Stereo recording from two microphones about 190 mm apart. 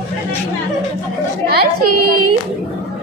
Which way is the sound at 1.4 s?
55° right (ahead or behind).